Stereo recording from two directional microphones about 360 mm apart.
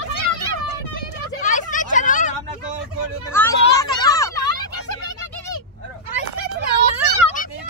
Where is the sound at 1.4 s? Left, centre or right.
Left.